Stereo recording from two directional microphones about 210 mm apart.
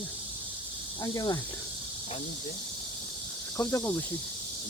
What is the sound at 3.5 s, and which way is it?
Insect, 10° left (ahead or behind).